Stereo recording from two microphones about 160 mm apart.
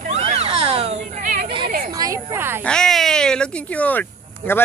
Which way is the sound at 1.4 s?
30° right (ahead or behind).